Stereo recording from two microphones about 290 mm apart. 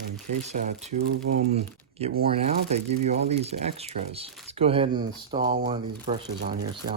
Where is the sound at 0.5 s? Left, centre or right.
Right.